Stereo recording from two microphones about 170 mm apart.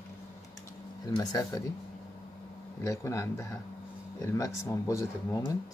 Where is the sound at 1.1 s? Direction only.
20° left (ahead or behind).